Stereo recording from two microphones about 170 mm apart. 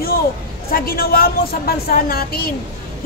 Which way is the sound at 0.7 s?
60° left (ahead or behind).